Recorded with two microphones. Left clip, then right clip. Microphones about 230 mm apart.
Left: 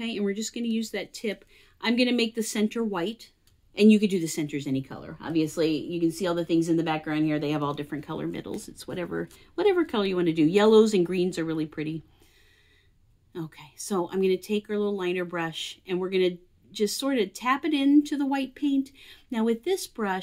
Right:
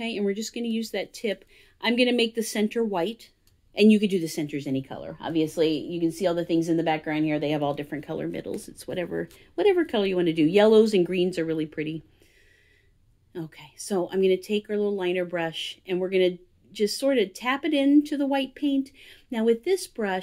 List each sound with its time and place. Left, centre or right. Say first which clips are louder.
0.0 s speech: right 2 dB; centre
4.8 s speech: right 4 dB; left
5.6 s speech: right 1 dB; centre
13.5 s speech: right 2 dB; centre